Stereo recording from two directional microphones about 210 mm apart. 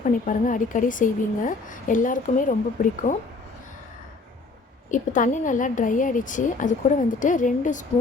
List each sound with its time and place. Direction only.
0.0 s speech: 40° left (ahead or behind)
4.9 s speech: 40° left (ahead or behind)